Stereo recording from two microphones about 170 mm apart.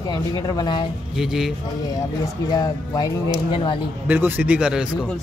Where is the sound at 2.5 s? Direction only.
20° left (ahead or behind).